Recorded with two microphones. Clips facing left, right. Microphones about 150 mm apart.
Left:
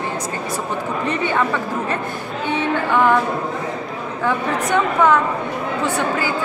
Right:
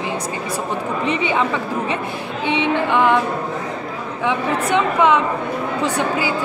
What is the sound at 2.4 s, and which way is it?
Music, 90° right.